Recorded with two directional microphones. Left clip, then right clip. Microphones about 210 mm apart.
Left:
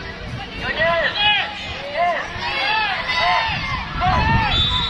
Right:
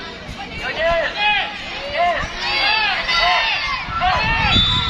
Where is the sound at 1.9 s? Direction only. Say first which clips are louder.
Right 1 dB; 50° right (ahead or behind).